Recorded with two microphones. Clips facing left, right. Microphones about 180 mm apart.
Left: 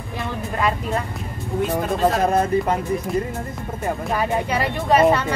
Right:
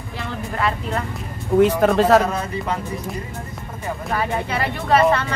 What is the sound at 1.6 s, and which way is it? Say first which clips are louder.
Speech: right 5 dB; 90° right.